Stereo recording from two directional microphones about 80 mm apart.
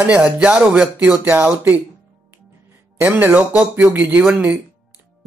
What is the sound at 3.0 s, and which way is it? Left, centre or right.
Speech, right.